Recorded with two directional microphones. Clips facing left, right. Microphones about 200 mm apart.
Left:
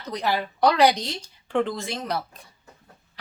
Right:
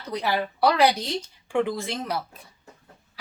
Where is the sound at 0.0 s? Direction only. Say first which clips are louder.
Even; 10° right (ahead or behind).